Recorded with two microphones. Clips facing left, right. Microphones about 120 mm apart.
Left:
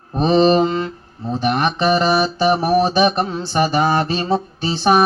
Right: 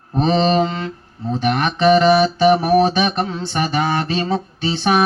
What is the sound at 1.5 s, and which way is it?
Mantra, 35° left (ahead or behind).